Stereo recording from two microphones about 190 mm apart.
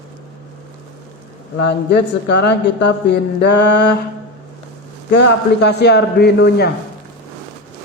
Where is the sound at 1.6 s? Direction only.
65° left (ahead or behind).